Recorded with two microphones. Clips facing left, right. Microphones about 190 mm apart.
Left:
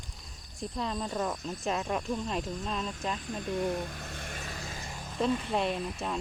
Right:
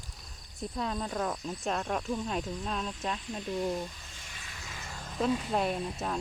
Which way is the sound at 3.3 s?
50° left (ahead or behind).